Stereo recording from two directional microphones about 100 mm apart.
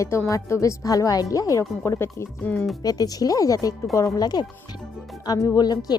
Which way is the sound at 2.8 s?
40° left (ahead or behind).